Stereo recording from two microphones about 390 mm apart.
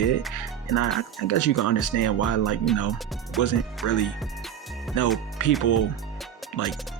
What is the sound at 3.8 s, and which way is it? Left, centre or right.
Speech, left.